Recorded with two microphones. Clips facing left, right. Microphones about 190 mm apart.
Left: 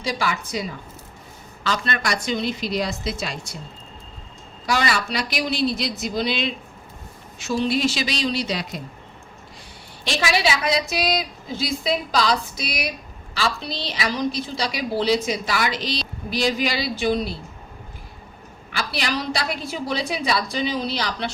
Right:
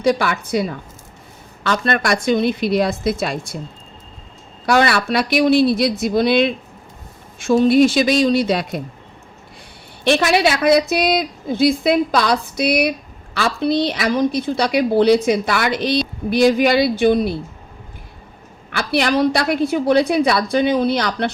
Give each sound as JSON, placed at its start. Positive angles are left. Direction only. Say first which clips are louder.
{"t": 0.0, "sound": "a woman's voice", "louder": "right 8 dB", "side_deg": -60}
{"t": 4.6, "sound": "a woman's voice", "louder": "right 7 dB", "side_deg": -60}
{"t": 10.0, "sound": "a woman's voice", "louder": "right 8 dB", "side_deg": -60}
{"t": 18.8, "sound": "a woman's voice", "louder": "right 10 dB", "side_deg": -60}